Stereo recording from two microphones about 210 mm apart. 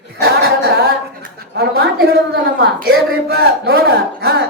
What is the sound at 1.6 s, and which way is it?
Speech, 50° right (ahead or behind).